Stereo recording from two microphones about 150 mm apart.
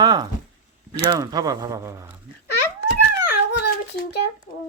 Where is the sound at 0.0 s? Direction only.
25° right (ahead or behind).